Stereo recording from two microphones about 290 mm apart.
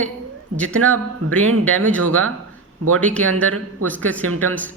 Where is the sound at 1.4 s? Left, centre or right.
Right.